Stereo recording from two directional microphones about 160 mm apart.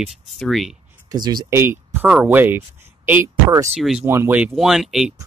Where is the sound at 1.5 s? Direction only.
15° right (ahead or behind).